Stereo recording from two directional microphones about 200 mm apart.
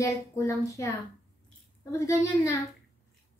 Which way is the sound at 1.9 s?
15° left (ahead or behind).